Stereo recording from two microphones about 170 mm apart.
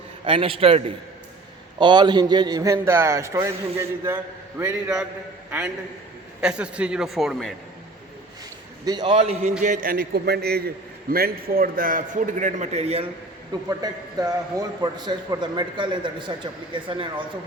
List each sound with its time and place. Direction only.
0.3 s a man's voice: 30° right (ahead or behind); by 7.5 s centre (ahead or behind)
8.8 s a man's voice: 25° right (ahead or behind)
9.6 s a man's voice: 55° right (ahead or behind); by 13.1 s 35° right (ahead or behind)
13.5 s a man's voice: 20° right (ahead or behind)